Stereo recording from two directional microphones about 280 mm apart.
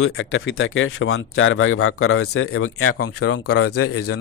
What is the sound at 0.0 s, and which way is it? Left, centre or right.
Speech, left.